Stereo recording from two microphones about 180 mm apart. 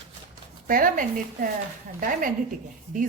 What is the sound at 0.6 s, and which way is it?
A woman's voice, 50° right (ahead or behind).